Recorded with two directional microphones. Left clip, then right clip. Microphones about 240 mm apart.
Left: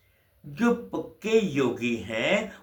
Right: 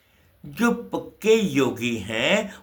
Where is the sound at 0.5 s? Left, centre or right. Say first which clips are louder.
Right 2 dB; right.